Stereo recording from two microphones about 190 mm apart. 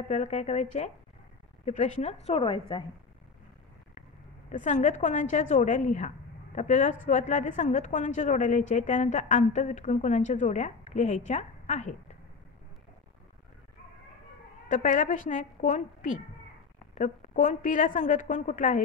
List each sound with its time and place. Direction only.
0.1 s a woman's voice: 40° left (ahead or behind)
4.5 s a woman's voice: 40° left (ahead or behind)
14.7 s a woman's voice: 40° left (ahead or behind)